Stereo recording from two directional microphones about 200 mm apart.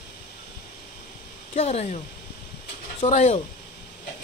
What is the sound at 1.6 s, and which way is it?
Speech, 30° left (ahead or behind).